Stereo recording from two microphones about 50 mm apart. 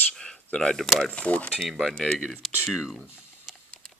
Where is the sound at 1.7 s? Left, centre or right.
Centre.